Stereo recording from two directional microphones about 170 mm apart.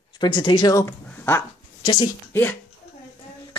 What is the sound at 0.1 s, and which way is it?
Speech, 30° left (ahead or behind).